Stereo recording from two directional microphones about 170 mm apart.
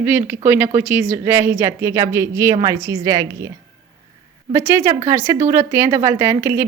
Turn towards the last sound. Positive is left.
turn(degrees=-15)  # may be behind; listen again after turning